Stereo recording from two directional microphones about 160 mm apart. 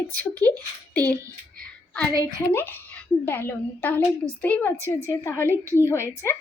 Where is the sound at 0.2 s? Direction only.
10° left (ahead or behind).